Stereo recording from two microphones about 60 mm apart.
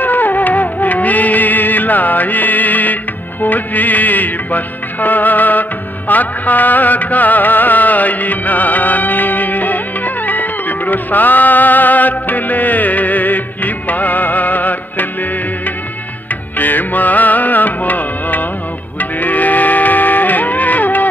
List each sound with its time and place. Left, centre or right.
0.0 s music: left
16.5 s music: left